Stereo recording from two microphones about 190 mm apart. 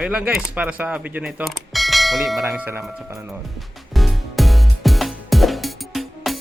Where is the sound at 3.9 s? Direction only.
Centre (ahead or behind).